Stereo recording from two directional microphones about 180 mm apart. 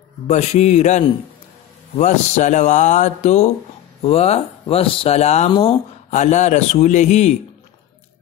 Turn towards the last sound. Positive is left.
turn(degrees=40)  # may be behind; listen again after turning